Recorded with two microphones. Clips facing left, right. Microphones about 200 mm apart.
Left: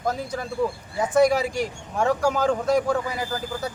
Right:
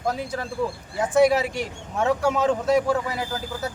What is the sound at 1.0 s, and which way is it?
Speech, 5° right (ahead or behind).